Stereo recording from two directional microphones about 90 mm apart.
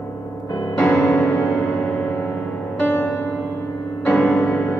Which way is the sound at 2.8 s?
15° left (ahead or behind).